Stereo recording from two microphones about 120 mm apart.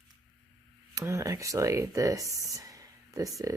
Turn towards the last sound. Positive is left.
turn(degrees=-30)  # may be behind; listen again after turning